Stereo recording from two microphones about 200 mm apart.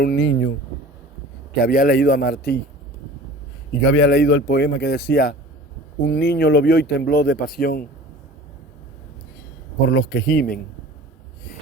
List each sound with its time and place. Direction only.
0.0 s speech: 55° left (ahead or behind)
1.6 s speech: 45° left (ahead or behind)
3.7 s speech: 70° left (ahead or behind); by 7.9 s 50° left (ahead or behind)
9.8 s speech: 55° left (ahead or behind)